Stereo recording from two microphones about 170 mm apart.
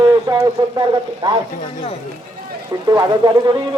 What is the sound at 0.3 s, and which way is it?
Speech, 25° right (ahead or behind).